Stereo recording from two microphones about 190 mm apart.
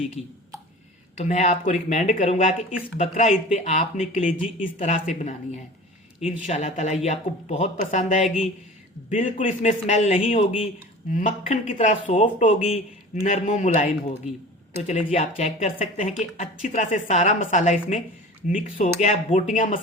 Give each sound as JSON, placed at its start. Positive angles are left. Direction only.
{"t": 1.2, "sound": "speech", "side_deg": 40}
{"t": 6.2, "sound": "speech", "side_deg": 40}